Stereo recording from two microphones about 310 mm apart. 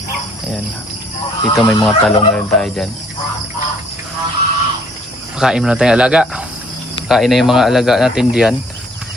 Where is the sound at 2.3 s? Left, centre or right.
Centre.